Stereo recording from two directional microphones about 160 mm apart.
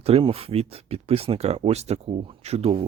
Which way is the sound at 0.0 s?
35° right (ahead or behind).